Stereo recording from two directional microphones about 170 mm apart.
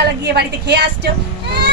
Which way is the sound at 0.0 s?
75° right (ahead or behind).